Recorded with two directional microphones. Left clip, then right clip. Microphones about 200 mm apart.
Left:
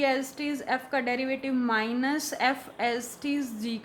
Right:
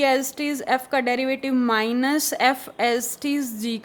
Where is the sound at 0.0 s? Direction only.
50° right (ahead or behind).